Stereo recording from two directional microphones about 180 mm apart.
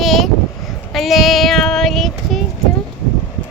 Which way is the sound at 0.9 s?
Centre (ahead or behind).